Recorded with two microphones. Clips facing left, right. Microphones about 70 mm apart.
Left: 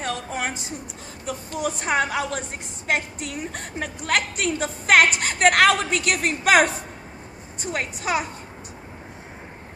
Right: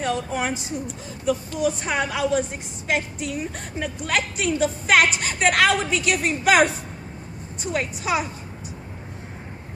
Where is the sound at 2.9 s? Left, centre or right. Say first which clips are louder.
Right 1 dB; left.